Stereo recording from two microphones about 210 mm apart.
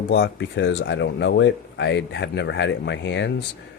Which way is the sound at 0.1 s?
55° left (ahead or behind).